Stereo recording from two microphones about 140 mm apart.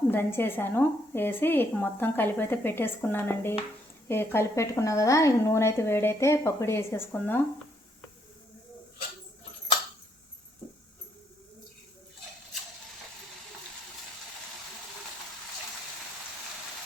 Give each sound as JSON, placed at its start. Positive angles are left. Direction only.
{"t": 0.1, "sound": "a woman's voice", "side_deg": 15}